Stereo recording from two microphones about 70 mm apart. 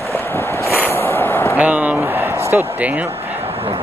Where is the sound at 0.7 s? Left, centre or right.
Left.